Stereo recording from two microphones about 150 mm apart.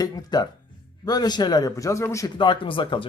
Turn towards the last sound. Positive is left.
turn(degrees=35)  # may be behind; listen again after turning